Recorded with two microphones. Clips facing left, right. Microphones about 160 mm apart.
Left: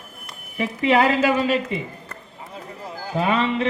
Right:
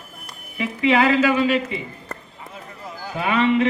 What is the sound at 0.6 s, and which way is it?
Speech, 40° left (ahead or behind).